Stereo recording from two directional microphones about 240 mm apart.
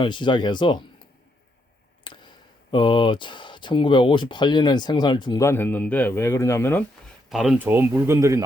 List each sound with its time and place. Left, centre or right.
0.0 s speech: centre
2.1 s a sound: centre
2.7 s speech: centre
7.3 s speech: centre